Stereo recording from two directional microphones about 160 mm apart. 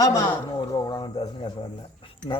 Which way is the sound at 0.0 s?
20° left (ahead or behind).